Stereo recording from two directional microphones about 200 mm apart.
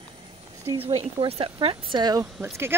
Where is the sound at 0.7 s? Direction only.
25° right (ahead or behind).